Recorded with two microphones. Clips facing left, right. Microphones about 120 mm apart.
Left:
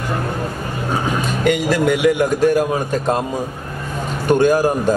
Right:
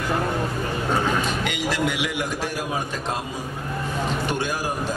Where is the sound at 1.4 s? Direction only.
45° left (ahead or behind).